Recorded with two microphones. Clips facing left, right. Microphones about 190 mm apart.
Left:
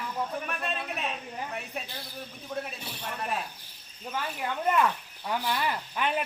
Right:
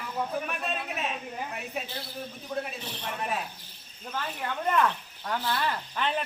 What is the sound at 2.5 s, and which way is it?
Speech, centre (ahead or behind).